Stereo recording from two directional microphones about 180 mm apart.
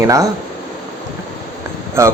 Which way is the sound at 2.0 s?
15° right (ahead or behind).